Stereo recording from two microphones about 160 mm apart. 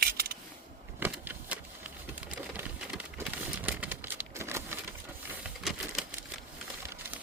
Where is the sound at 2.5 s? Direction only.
10° right (ahead or behind).